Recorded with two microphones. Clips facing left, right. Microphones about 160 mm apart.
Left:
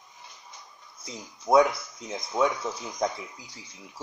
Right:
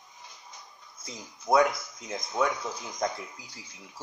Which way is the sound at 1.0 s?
Centre (ahead or behind).